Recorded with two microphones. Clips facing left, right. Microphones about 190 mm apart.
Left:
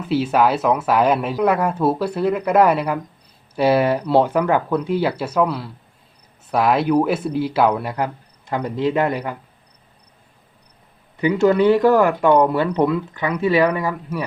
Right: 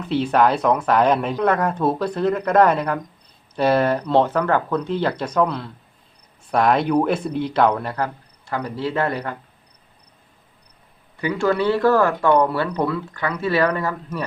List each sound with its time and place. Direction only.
0.0 s speech: 5° left (ahead or behind)
11.2 s speech: 20° left (ahead or behind)